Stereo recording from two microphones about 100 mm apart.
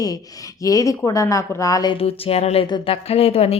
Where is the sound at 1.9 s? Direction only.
75° left (ahead or behind); by 2.7 s 90° left.